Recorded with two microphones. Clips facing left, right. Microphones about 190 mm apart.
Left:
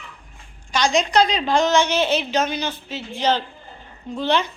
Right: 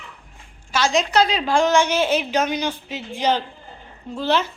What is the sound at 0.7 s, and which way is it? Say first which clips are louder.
A woman's voice: even; 5° right (ahead or behind).